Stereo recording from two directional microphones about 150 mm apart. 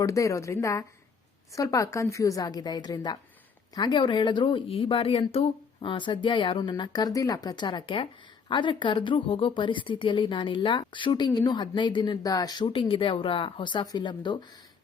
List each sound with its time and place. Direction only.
0.0 s a woman's voice: 20° left (ahead or behind)